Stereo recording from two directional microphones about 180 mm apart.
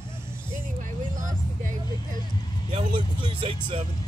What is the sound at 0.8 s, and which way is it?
Vehicle, 45° right (ahead or behind).